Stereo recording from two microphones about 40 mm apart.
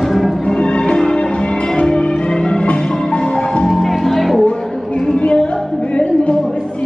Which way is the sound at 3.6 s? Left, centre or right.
Centre.